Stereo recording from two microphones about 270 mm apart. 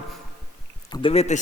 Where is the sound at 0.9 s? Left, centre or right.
Centre.